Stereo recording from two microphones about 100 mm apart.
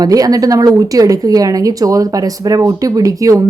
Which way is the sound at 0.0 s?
40° right (ahead or behind).